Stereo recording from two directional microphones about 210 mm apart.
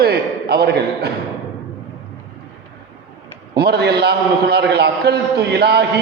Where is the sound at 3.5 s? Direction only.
50° right (ahead or behind).